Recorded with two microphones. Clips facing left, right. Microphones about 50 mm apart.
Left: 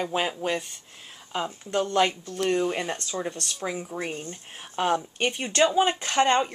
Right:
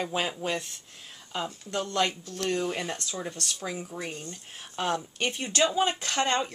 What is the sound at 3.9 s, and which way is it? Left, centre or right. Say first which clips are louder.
Speech: left 4 dB; left.